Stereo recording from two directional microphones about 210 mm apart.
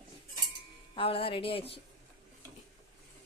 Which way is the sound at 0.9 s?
25° left (ahead or behind).